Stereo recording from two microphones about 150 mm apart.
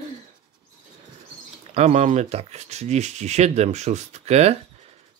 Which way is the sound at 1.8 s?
45° right (ahead or behind).